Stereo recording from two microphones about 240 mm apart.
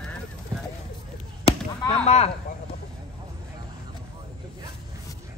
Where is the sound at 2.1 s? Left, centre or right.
Left.